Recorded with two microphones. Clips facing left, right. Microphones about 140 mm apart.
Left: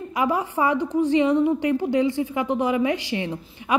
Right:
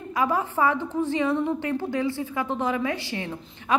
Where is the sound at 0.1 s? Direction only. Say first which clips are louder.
Left 1 dB; 15° left (ahead or behind).